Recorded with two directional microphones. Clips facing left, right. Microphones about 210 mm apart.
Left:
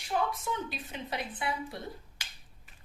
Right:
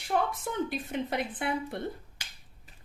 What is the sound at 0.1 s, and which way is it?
A woman's voice, 55° right (ahead or behind).